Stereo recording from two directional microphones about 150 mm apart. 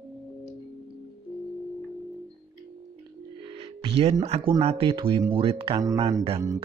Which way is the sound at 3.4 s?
40° right (ahead or behind).